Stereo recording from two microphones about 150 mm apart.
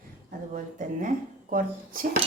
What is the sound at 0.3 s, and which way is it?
Speech, 60° right (ahead or behind).